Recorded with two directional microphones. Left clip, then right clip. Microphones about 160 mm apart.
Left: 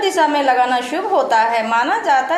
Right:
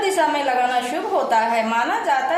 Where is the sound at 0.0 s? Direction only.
30° left (ahead or behind).